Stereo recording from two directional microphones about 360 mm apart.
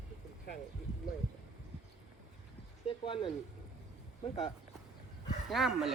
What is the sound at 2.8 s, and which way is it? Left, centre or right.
Speech, centre.